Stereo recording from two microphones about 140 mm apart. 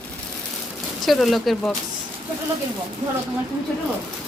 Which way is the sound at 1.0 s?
Centre (ahead or behind).